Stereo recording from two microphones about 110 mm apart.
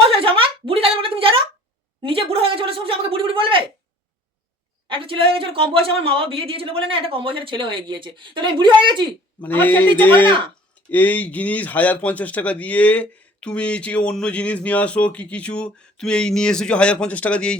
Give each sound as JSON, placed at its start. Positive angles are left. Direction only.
{"t": 0.1, "sound": "a sound", "side_deg": -55}
{"t": 4.9, "sound": "speech", "side_deg": -55}
{"t": 9.4, "sound": "speech", "side_deg": 15}